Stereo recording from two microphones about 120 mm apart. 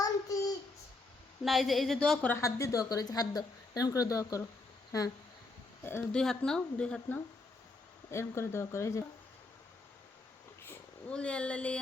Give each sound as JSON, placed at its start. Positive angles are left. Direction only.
{"t": 0.0, "sound": "child singing", "side_deg": 30}
{"t": 1.5, "sound": "a woman's voice", "side_deg": 0}
{"t": 2.4, "sound": "a woman's voice", "side_deg": 25}
{"t": 5.8, "sound": "speech", "side_deg": 20}
{"t": 6.1, "sound": "a woman's voice", "side_deg": 5}
{"t": 8.1, "sound": "a woman's voice", "side_deg": 20}
{"t": 11.1, "sound": "a woman's voice", "side_deg": 10}